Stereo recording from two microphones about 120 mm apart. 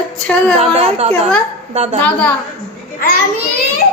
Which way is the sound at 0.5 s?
60° right (ahead or behind).